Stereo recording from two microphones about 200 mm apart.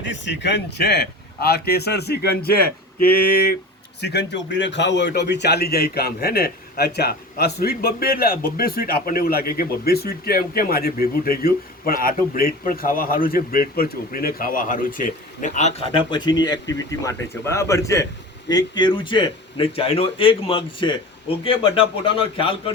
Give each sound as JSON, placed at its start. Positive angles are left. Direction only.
{"t": 0.0, "sound": "a man's voice", "side_deg": 65}
{"t": 15.9, "sound": "a man's voice", "side_deg": 25}